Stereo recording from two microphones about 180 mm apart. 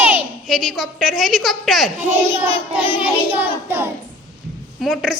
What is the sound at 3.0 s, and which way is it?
Child singing, 10° right (ahead or behind).